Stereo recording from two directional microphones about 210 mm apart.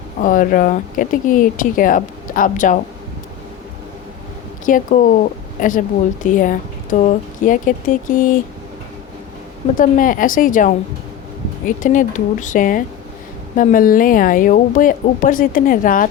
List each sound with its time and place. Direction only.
0.2 s a woman's voice: 40° left (ahead or behind)
4.6 s a woman's voice: 40° left (ahead or behind)
9.7 s a woman's voice: 40° left (ahead or behind)
11.8 s a woman's voice: 40° left (ahead or behind)